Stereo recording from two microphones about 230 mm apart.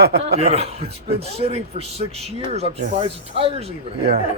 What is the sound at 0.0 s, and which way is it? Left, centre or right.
Speech, right.